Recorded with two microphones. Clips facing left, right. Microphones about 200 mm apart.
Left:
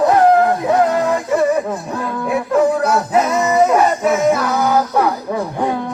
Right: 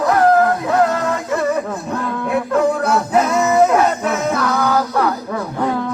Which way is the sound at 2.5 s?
5° left (ahead or behind).